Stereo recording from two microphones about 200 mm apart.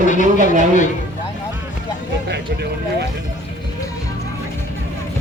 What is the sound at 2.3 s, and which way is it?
Speech, 55° right (ahead or behind).